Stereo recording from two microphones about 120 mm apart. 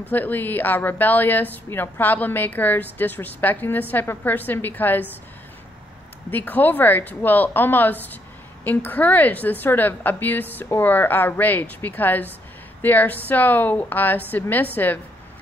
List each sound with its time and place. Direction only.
0.1 s speech: 15° left (ahead or behind)
6.3 s speech: 15° left (ahead or behind)